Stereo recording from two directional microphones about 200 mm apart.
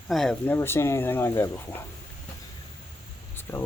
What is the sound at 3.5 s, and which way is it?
Speech, 10° left (ahead or behind).